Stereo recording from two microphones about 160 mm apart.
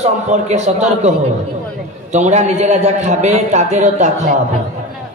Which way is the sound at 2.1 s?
45° right (ahead or behind).